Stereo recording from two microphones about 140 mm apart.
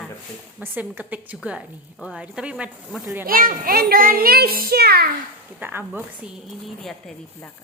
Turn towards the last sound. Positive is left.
turn(degrees=0)  # may be behind; listen again after turning